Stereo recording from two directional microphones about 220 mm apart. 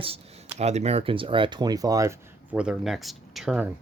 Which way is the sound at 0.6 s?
30° right (ahead or behind).